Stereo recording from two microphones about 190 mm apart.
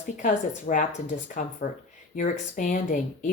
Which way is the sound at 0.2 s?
45° left (ahead or behind).